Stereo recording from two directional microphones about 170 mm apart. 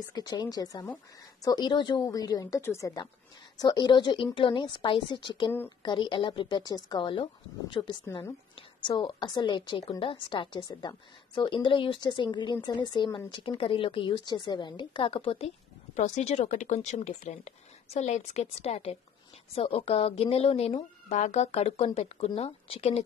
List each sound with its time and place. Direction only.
0.0 s a woman's voice: 25° left (ahead or behind)